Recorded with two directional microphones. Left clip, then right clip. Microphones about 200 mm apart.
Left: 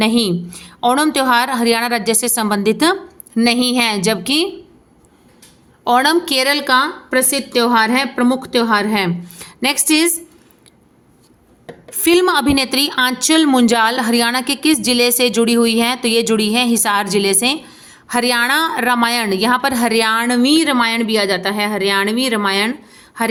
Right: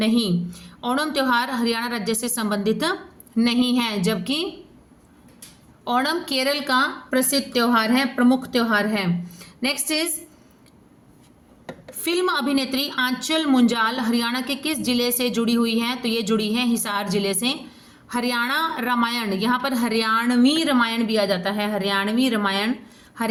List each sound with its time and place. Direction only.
0.0 s a woman's voice: 55° left (ahead or behind)
5.8 s a woman's voice: 50° left (ahead or behind)
11.9 s a woman's voice: 55° left (ahead or behind)